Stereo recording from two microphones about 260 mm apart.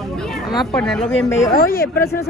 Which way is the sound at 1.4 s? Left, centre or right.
Left.